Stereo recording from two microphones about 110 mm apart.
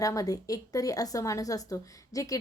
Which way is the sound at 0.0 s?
30° left (ahead or behind).